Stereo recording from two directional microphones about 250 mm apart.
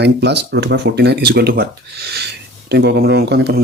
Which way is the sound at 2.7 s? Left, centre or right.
Right.